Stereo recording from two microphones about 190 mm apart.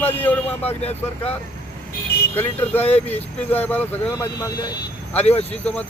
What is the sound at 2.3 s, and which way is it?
Speech, 10° left (ahead or behind).